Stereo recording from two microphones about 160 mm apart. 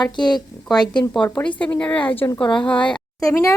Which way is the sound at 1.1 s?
5° left (ahead or behind).